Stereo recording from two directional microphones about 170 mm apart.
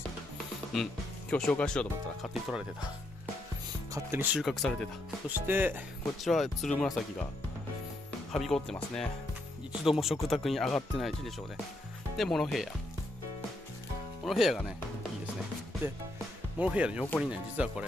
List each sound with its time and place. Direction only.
1.3 s speech: 5° left (ahead or behind)
3.9 s speech: 15° right (ahead or behind); by 4.8 s 5° left (ahead or behind)
5.5 s speech: 10° right (ahead or behind)
6.2 s speech: centre (ahead or behind)
8.3 s speech: 5° left (ahead or behind)
14.2 s speech: centre (ahead or behind)
16.5 s speech: 5° right (ahead or behind)